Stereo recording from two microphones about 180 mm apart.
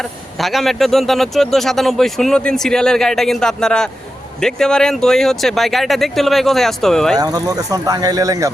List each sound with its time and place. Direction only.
0.0 s a man's voice: centre (ahead or behind)
7.2 s speech: 20° right (ahead or behind)